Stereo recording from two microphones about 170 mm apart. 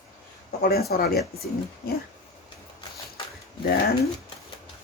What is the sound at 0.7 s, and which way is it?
Speech, 65° left (ahead or behind).